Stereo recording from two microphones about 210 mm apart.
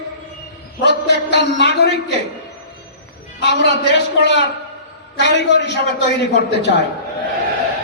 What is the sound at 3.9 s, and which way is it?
A man's voice, 55° left (ahead or behind).